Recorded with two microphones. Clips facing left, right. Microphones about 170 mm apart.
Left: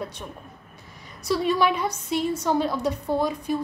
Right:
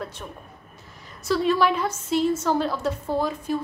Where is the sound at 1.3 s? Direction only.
Centre (ahead or behind).